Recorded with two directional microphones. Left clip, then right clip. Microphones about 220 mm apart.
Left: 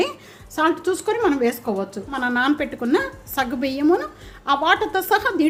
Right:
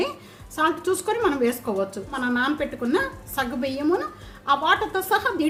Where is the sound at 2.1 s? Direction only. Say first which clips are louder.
Left 6 dB; 30° left (ahead or behind).